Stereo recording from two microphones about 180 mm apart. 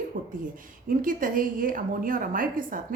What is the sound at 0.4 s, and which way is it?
A woman's voice, 50° right (ahead or behind).